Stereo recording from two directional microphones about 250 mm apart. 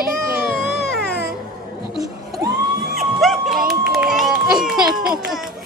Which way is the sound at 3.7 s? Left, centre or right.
Centre.